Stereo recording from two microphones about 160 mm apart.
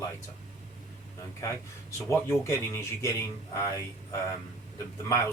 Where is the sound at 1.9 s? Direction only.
15° left (ahead or behind).